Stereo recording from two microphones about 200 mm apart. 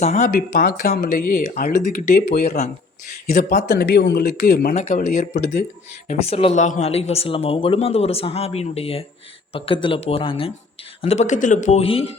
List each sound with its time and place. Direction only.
0.0 s speech: 35° left (ahead or behind)
0.3 s speech: 45° left (ahead or behind)
3.7 s speech: 60° left (ahead or behind)
4.3 s speech: 40° left (ahead or behind)
4.7 s speech: 35° left (ahead or behind)
6.1 s speech: 30° left (ahead or behind)